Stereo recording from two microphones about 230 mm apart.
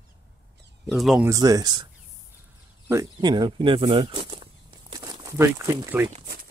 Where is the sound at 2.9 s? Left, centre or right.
Centre.